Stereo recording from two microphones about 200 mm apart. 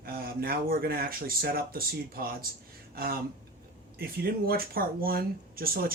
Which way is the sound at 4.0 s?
50° right (ahead or behind).